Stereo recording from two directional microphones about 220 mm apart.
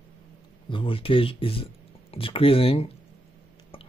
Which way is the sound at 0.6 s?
25° left (ahead or behind).